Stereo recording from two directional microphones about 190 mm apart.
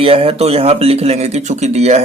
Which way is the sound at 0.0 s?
30° right (ahead or behind).